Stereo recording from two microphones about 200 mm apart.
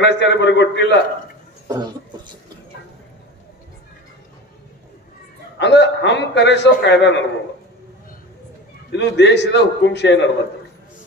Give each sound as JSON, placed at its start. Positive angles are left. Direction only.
{"t": 0.0, "sound": "a man's voice", "side_deg": 60}
{"t": 1.7, "sound": "a sound", "side_deg": -20}
{"t": 5.6, "sound": "a man's voice", "side_deg": 60}
{"t": 8.9, "sound": "a man's voice", "side_deg": 60}